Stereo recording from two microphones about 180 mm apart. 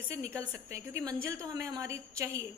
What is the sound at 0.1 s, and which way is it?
A woman's voice, 15° right (ahead or behind).